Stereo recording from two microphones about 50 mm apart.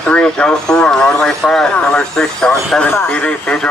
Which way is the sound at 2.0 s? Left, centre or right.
Centre.